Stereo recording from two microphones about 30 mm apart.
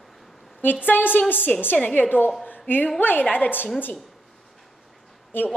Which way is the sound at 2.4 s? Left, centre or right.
Left.